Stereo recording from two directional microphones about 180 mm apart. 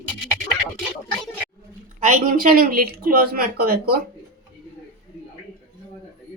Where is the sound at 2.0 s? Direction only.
50° right (ahead or behind).